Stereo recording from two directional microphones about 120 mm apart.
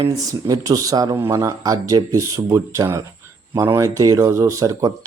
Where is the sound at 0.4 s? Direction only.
30° right (ahead or behind).